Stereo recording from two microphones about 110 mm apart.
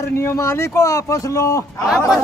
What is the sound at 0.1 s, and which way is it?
Speech, 25° left (ahead or behind).